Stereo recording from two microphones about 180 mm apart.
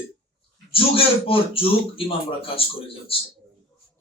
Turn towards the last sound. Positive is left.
turn(degrees=30)  # may be behind; listen again after turning